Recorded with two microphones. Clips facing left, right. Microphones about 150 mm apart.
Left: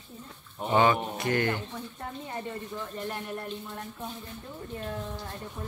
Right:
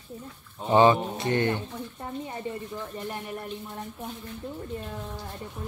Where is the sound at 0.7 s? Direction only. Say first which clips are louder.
Right 4 dB; 25° right (ahead or behind).